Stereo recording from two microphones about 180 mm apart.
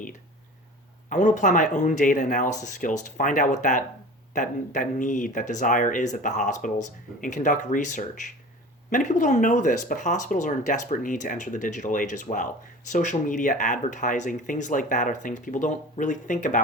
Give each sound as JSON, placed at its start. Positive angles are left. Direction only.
{"t": 1.1, "sound": "speech", "side_deg": 45}